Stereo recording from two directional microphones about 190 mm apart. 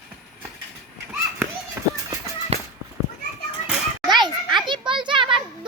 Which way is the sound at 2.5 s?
35° right (ahead or behind).